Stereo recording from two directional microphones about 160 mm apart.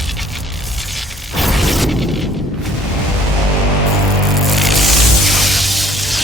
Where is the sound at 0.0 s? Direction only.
Centre (ahead or behind).